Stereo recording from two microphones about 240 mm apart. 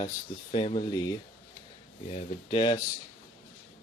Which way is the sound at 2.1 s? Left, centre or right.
Left.